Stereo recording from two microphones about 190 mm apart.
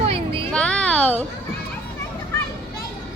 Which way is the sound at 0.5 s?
5° left (ahead or behind).